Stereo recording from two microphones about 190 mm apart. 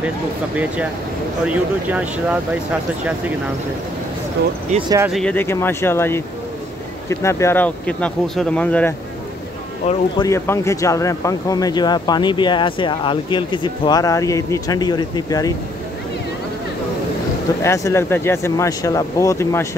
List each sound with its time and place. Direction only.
1.4 s speech: 5° right (ahead or behind)
4.8 s speech: 15° right (ahead or behind)
5.1 s speech: 5° left (ahead or behind)
9.8 s speech: 35° left (ahead or behind)
10.2 s speech: 15° left (ahead or behind)
17.6 s speech: 15° left (ahead or behind)